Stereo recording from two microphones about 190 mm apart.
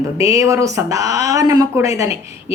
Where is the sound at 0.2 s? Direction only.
15° right (ahead or behind).